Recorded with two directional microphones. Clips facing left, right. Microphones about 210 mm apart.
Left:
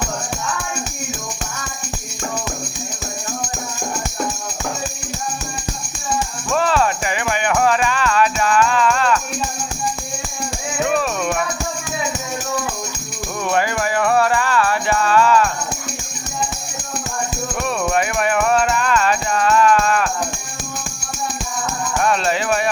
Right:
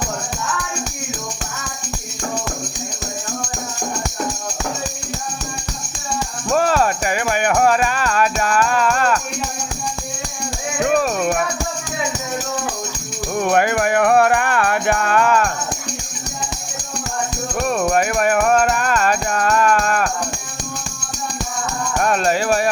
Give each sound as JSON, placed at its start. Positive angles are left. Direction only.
{"t": 6.1, "sound": "music", "side_deg": -40}
{"t": 10.8, "sound": "music", "side_deg": -45}
{"t": 13.4, "sound": "music", "side_deg": -55}
{"t": 17.6, "sound": "music", "side_deg": -40}
{"t": 22.0, "sound": "music", "side_deg": -45}